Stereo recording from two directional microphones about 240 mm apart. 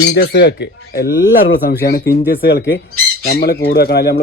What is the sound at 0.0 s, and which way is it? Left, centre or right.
Speech, left.